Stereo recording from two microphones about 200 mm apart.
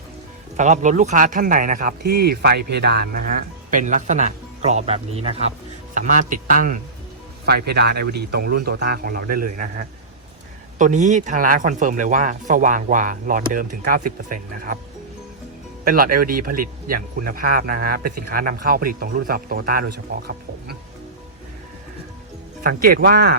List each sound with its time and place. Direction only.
0.5 s speech: 35° right (ahead or behind)
15.8 s speech: 45° right (ahead or behind)
22.6 s speech: 45° right (ahead or behind)